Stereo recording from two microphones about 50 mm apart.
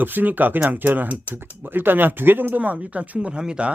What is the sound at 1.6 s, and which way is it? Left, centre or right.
Speech, right.